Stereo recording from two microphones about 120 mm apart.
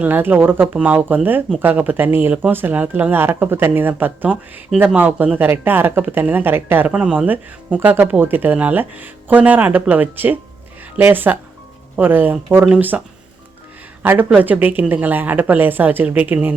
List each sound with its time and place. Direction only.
0.0 s speech: 15° right (ahead or behind)
4.7 s speech: 5° right (ahead or behind)
14.0 s speech: 15° right (ahead or behind)